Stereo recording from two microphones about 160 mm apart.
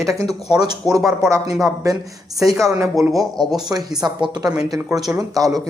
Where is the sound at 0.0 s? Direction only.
20° right (ahead or behind).